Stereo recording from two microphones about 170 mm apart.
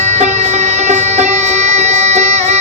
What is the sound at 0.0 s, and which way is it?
Music, 40° right (ahead or behind).